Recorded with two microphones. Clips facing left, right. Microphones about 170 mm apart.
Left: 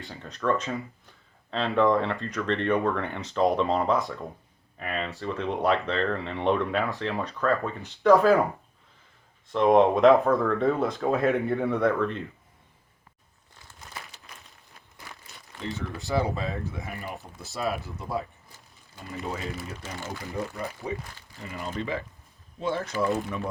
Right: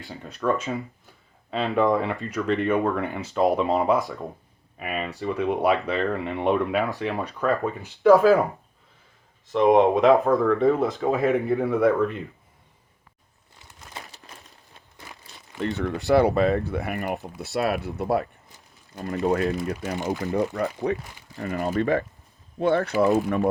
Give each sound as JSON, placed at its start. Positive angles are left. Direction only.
{"t": 0.0, "sound": "speech", "side_deg": 0}
{"t": 1.5, "sound": "speech", "side_deg": -10}
{"t": 8.0, "sound": "speech", "side_deg": -5}
{"t": 9.5, "sound": "speech", "side_deg": 0}
{"t": 13.9, "sound": "crumpling", "side_deg": -25}
{"t": 15.6, "sound": "speech", "side_deg": -65}